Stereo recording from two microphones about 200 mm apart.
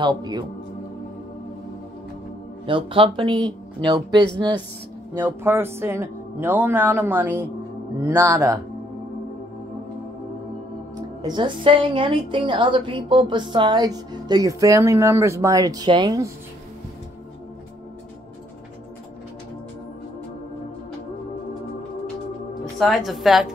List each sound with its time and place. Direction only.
0.0 s a woman's voice: 20° right (ahead or behind)
2.6 s a woman's voice: 25° right (ahead or behind)
5.1 s speech: 10° right (ahead or behind)
11.2 s a woman's voice: 25° right (ahead or behind)
22.5 s speech: centre (ahead or behind)